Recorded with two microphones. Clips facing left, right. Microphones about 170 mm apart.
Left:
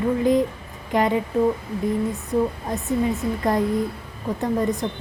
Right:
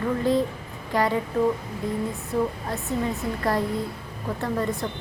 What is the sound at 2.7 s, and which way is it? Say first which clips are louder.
Speech: left 4 dB; 20° left (ahead or behind).